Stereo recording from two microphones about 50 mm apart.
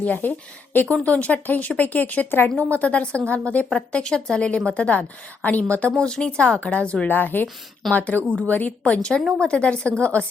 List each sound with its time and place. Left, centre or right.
0.0 s a woman's voice: left
6.0 s a woman's voice: centre
7.1 s speech: left
8.8 s a woman's voice: centre